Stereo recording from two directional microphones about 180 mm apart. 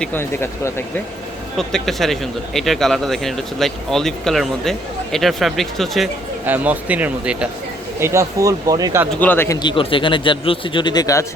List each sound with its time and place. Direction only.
0.0 s speech: 10° left (ahead or behind)
1.5 s speech: centre (ahead or behind)
6.4 s speech: 10° right (ahead or behind)
9.2 s speech: 10° left (ahead or behind)
9.6 s speech: 25° left (ahead or behind)